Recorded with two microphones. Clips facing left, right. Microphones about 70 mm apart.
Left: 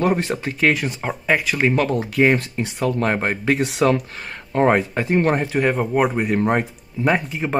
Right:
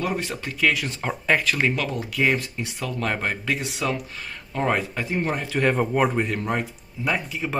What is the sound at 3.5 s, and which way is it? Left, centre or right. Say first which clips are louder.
Speech: left 9 dB; left.